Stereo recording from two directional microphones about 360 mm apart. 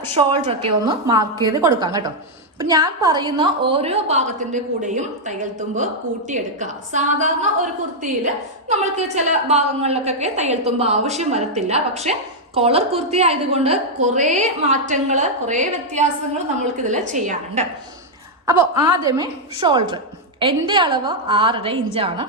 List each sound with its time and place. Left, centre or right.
0.1 s a woman's voice: centre
8.7 s a woman's voice: centre